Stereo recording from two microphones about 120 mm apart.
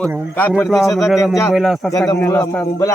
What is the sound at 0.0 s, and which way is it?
Speech, 15° left (ahead or behind).